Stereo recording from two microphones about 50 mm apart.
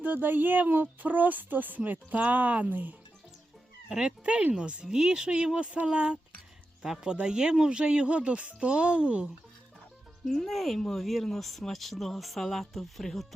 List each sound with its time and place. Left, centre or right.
0.0 s speech: right
3.8 s speech: centre
10.2 s speech: centre